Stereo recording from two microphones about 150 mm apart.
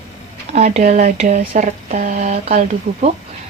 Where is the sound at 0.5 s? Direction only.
45° right (ahead or behind).